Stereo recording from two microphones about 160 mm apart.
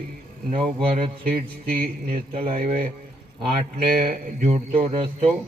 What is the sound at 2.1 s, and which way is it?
Speech, 40° right (ahead or behind).